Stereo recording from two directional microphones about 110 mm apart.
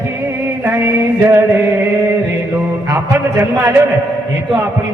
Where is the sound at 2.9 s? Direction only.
25° right (ahead or behind).